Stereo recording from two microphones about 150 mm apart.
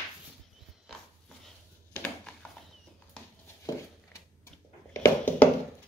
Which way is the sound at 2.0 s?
10° left (ahead or behind).